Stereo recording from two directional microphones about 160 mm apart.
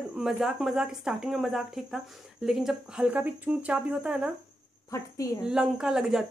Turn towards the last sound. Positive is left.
turn(degrees=0)  # may be behind; listen again after turning